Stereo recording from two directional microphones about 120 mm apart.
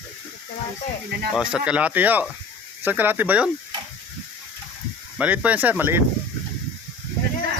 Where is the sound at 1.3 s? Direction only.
5° right (ahead or behind).